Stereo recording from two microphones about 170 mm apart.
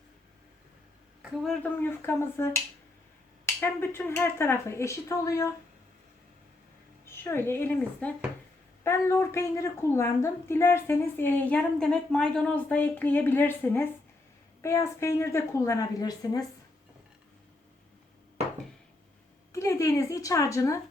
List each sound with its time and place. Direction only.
1.2 s speech: centre (ahead or behind)
1.6 s a woman's voice: 10° left (ahead or behind)
7.0 s a woman's voice: 15° left (ahead or behind)
19.5 s a woman's voice: 20° left (ahead or behind)